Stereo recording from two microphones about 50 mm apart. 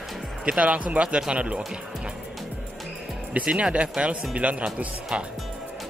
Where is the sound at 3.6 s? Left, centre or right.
Right.